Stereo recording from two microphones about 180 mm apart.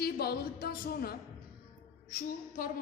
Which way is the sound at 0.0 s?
60° left (ahead or behind).